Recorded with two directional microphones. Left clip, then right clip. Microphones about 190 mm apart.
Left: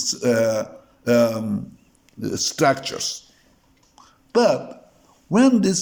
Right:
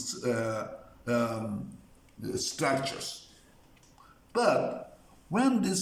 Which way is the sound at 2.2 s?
55° left (ahead or behind).